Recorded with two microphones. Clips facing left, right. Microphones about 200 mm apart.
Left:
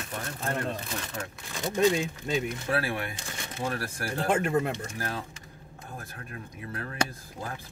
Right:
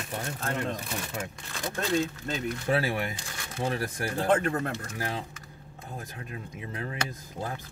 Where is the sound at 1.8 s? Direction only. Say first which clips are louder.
Left 4 dB; 10° left (ahead or behind).